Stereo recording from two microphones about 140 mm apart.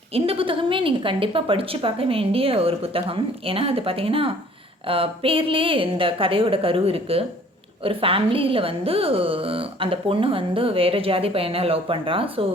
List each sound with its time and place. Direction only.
0.1 s a woman's voice: 40° right (ahead or behind)